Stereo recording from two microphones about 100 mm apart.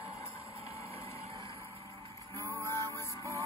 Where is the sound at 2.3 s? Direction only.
30° left (ahead or behind).